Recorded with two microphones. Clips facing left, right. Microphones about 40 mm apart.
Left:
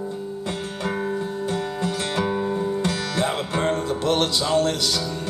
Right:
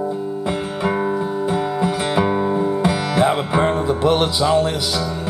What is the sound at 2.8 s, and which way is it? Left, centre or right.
Music, centre.